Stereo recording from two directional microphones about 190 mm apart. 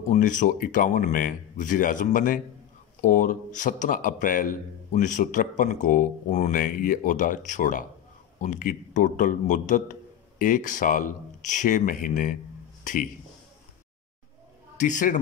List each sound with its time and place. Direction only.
0.1 s a man's voice: 40° left (ahead or behind)
14.8 s a man's voice: 40° left (ahead or behind)